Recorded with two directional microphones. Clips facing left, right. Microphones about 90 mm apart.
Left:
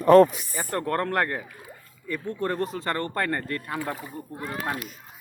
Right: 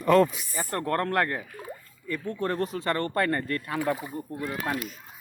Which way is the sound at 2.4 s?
35° left (ahead or behind).